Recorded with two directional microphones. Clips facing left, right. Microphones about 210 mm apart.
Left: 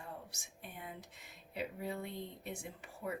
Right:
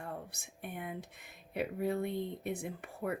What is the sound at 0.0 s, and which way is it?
Speech, 55° right (ahead or behind).